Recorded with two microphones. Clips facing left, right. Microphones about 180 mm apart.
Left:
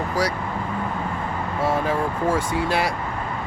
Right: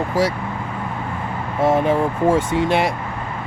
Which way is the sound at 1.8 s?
25° right (ahead or behind).